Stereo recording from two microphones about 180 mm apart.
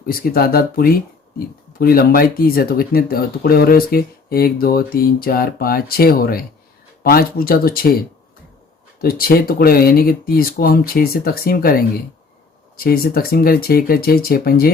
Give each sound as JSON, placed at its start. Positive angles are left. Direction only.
{"t": 0.1, "sound": "speech", "side_deg": 55}